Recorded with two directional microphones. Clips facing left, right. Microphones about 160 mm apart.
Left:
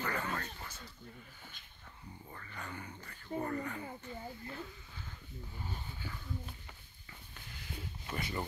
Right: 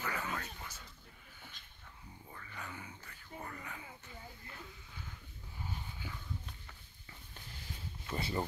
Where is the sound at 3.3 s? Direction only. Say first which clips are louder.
Left 10 dB; 35° left (ahead or behind).